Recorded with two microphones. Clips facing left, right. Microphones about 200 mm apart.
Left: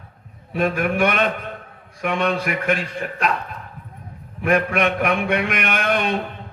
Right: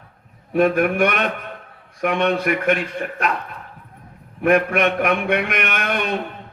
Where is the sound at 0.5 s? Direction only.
55° right (ahead or behind).